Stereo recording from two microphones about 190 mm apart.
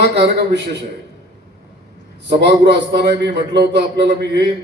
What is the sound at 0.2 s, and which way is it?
Speech, 65° right (ahead or behind).